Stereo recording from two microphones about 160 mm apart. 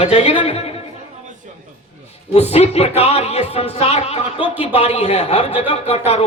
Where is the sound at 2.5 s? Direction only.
40° left (ahead or behind).